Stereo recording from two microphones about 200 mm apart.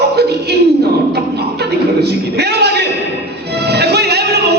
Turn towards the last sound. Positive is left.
turn(degrees=-55)  # may be behind; listen again after turning